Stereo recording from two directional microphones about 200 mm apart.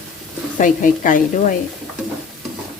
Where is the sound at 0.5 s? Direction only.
40° left (ahead or behind).